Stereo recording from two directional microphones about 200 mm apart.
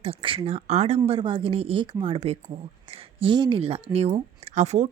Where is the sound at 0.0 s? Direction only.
30° right (ahead or behind).